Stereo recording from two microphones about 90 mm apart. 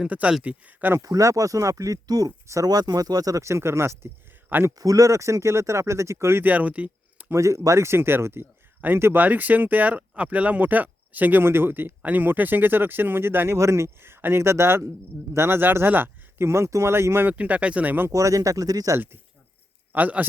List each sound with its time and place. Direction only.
0.0 s speech: 15° right (ahead or behind)
0.9 s speech: 40° right (ahead or behind)
4.7 s speech: 45° right (ahead or behind); by 7.3 s 15° right (ahead or behind)
7.3 s speech: 35° right (ahead or behind)
17.3 s speech: 15° right (ahead or behind)
18.1 s speech: 35° right (ahead or behind)
19.9 s speech: 15° right (ahead or behind)